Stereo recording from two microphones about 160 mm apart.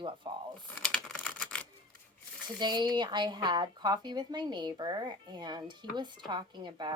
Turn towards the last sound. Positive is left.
turn(degrees=-30)  # may be behind; listen again after turning